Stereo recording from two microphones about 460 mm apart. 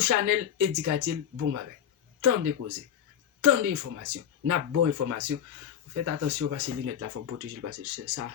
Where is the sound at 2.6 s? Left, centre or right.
Right.